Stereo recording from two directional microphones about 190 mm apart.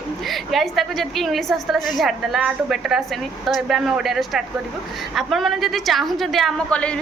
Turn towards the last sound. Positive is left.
turn(degrees=5)  # may be behind; listen again after turning